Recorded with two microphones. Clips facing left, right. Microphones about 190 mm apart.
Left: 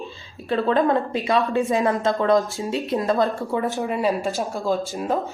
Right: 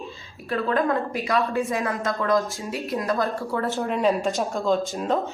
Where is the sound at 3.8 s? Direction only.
5° left (ahead or behind).